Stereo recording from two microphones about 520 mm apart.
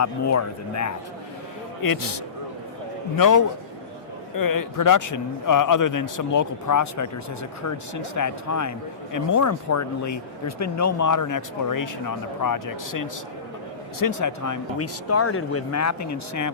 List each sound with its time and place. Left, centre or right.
0.0 s speech: left
8.1 s speech: left